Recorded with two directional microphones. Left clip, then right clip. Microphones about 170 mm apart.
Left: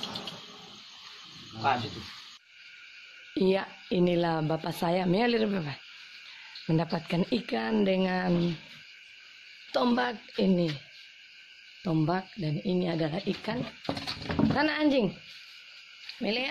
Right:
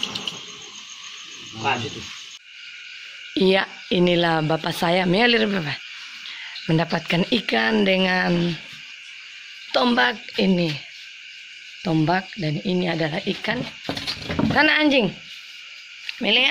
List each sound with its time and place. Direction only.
0.0 s a sound: 20° left (ahead or behind)
3.3 s speech: centre (ahead or behind)
9.7 s speech: 10° left (ahead or behind)
11.8 s speech: 5° left (ahead or behind)
16.2 s speech: centre (ahead or behind)